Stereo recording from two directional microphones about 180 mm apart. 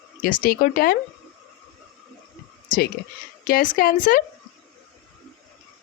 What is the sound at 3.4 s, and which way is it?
Speech, 50° left (ahead or behind).